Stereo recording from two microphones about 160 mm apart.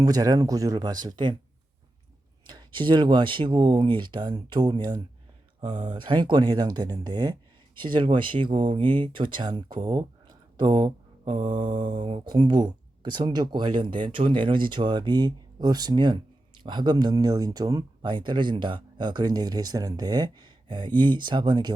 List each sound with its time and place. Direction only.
0.0 s speech: 25° right (ahead or behind)
2.5 s speech: 30° right (ahead or behind)